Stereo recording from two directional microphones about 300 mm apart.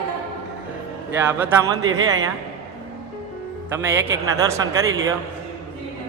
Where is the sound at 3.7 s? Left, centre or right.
Centre.